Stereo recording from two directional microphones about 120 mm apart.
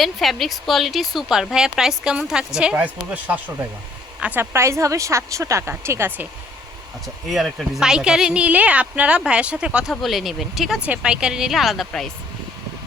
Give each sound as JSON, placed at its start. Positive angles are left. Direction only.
{"t": 0.0, "sound": "speech", "side_deg": 0}
{"t": 7.3, "sound": "speech", "side_deg": -5}